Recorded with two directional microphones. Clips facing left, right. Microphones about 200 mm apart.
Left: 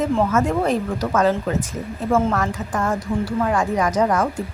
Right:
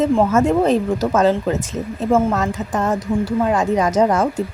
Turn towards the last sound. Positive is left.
turn(degrees=-25)  # may be behind; listen again after turning